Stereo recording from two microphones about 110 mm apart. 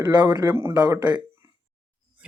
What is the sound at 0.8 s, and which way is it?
Speech, 40° right (ahead or behind).